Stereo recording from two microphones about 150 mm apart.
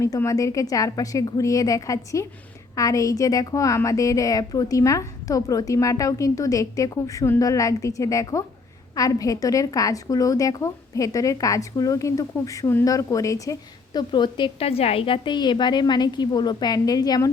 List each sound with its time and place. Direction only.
0.0 s a woman's voice: 20° left (ahead or behind)